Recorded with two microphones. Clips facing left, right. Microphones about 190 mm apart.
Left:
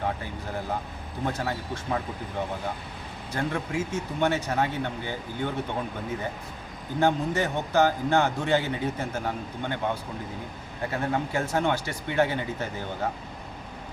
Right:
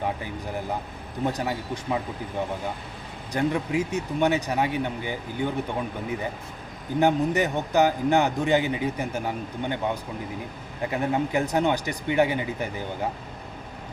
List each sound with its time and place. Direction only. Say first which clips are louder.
1.2 s a man's voice: right 3 dB; 15° right (ahead or behind)
3.3 s a man's voice: right 4 dB; 15° right (ahead or behind)
7.0 s a man's voice: right 3 dB; 15° right (ahead or behind)